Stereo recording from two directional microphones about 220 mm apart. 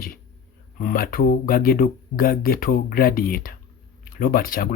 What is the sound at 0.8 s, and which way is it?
Speech, 40° left (ahead or behind).